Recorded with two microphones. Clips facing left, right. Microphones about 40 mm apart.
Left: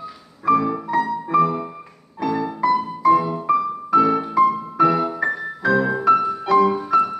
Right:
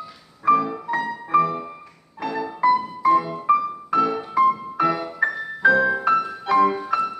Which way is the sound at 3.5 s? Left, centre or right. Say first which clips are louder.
Right 1 dB; centre.